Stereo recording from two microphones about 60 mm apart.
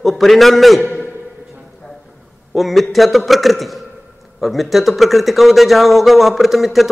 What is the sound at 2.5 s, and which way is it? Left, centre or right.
Speech, centre.